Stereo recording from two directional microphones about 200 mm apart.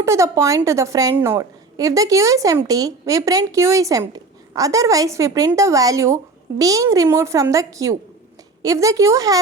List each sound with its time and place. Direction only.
0.0 s a woman's voice: 15° right (ahead or behind)